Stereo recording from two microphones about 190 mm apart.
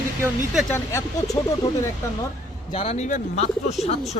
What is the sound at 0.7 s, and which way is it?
Speech, 15° left (ahead or behind).